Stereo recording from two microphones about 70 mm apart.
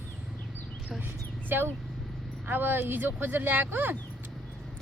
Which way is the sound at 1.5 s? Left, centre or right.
Right.